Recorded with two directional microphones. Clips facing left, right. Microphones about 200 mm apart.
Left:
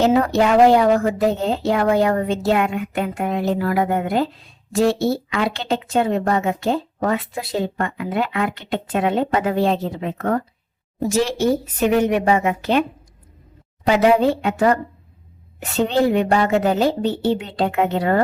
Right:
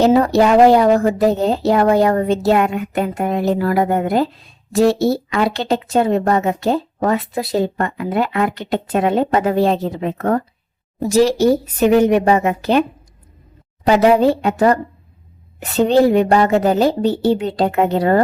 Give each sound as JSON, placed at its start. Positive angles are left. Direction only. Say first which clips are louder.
{"t": 0.0, "sound": "a woman's voice", "louder": "right 4 dB", "side_deg": -35}
{"t": 13.8, "sound": "a woman's voice", "louder": "right 3 dB", "side_deg": -40}